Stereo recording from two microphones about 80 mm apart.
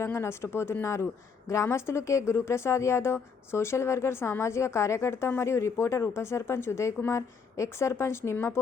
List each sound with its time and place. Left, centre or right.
0.0 s a woman's voice: left